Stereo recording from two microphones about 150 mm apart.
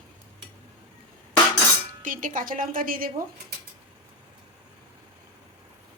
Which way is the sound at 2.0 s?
60° right (ahead or behind).